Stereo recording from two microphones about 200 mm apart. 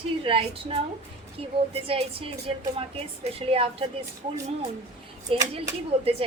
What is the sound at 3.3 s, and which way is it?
Speech, 30° right (ahead or behind).